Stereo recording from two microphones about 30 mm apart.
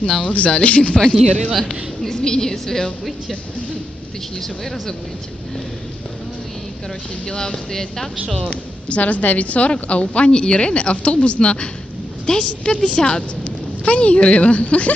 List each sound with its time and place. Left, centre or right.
0.0 s speech: left
0.5 s a woman's voice: left
1.5 s a woman's voice: centre
2.0 s a woman's voice: left
4.4 s a woman's voice: centre
7.2 s speech: left
8.5 s speech: left
10.3 s a woman's voice: left
13.4 s speech: left